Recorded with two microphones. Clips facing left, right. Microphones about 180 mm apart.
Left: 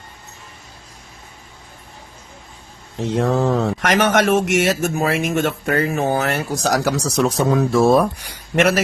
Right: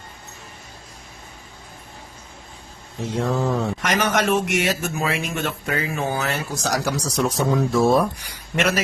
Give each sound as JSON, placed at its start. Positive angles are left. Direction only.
{"t": 3.0, "sound": "speech", "side_deg": 70}
{"t": 3.8, "sound": "speech", "side_deg": 50}